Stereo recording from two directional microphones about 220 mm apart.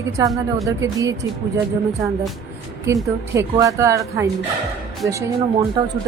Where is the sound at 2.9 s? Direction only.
15° right (ahead or behind).